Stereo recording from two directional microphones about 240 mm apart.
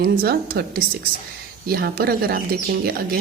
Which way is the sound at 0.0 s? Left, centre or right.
Right.